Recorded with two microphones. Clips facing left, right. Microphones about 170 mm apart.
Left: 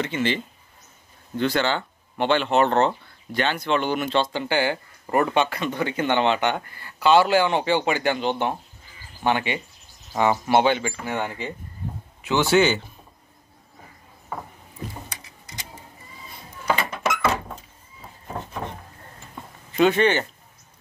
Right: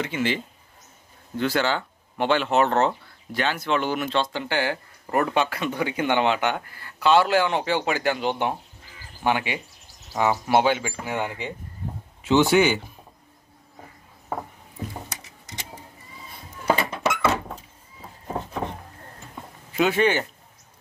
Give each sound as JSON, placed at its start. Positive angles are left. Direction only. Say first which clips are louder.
{"t": 0.0, "sound": "speech", "louder": "left 1 dB", "side_deg": -10}
{"t": 16.6, "sound": "a sound", "louder": "right 1 dB", "side_deg": -30}
{"t": 19.8, "sound": "speech", "louder": "left 2 dB", "side_deg": -5}